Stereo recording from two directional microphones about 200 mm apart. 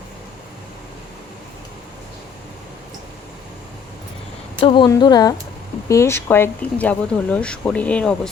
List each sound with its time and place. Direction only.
4.6 s speech: 25° left (ahead or behind); by 8.3 s 5° left (ahead or behind)